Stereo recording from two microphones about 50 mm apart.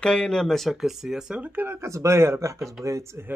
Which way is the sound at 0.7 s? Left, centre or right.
Centre.